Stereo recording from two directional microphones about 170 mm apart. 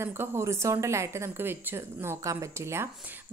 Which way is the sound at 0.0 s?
15° right (ahead or behind).